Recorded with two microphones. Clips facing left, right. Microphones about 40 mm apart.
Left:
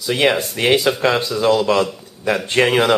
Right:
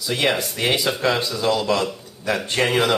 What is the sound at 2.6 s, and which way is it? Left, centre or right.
Speech, left.